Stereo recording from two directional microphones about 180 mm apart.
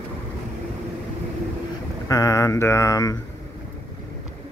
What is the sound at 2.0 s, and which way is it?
Mantra, 20° left (ahead or behind).